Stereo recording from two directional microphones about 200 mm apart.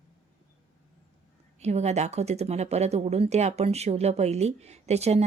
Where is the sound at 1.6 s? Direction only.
35° right (ahead or behind).